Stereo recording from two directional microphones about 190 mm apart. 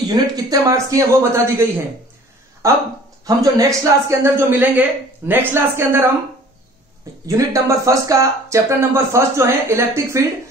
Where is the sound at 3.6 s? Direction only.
15° right (ahead or behind).